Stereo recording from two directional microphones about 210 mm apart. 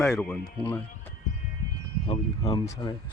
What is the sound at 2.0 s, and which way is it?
Speech, 20° left (ahead or behind).